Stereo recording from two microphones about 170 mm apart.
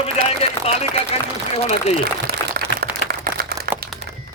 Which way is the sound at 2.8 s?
65° right (ahead or behind).